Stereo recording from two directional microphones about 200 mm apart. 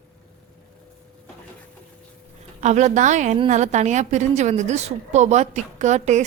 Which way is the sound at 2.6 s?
35° right (ahead or behind).